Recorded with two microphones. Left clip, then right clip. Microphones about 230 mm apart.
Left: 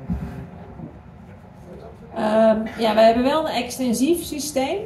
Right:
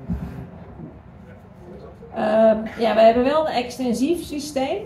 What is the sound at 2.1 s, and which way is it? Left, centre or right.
A woman's voice, left.